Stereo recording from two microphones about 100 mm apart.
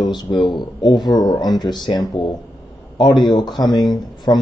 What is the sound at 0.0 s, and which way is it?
Speech, 45° left (ahead or behind).